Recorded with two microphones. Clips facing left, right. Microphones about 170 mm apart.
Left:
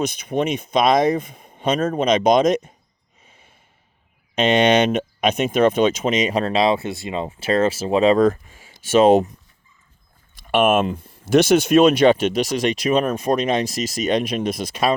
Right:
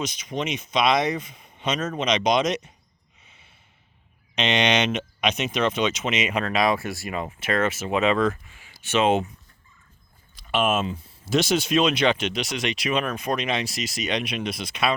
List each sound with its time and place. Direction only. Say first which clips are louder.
0.0 s speech: left 7 dB; 55° left (ahead or behind)
3.2 s snort: left 5 dB; 45° left (ahead or behind)
4.4 s speech: left 7 dB; 50° left (ahead or behind)
10.5 s speech: left 6 dB; 55° left (ahead or behind); by 14.9 s 40° left (ahead or behind)